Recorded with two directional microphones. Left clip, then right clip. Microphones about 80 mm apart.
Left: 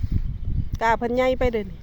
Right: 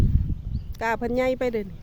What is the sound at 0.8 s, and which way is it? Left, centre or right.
Speech, centre.